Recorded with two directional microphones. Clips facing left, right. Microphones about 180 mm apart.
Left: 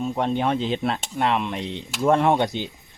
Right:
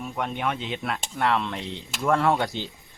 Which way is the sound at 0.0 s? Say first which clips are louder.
Left 6 dB; 30° left (ahead or behind).